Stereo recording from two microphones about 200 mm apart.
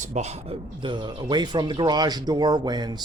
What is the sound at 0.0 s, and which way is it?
Speech, 35° right (ahead or behind).